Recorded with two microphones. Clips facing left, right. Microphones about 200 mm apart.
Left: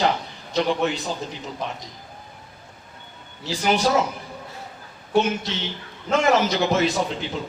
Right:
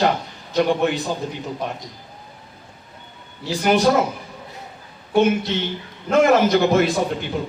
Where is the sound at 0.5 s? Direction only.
55° right (ahead or behind).